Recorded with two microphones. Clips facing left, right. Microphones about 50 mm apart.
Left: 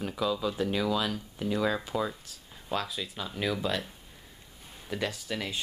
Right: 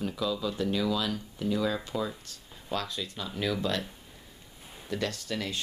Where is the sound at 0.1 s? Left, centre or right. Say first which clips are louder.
Left 1 dB; centre.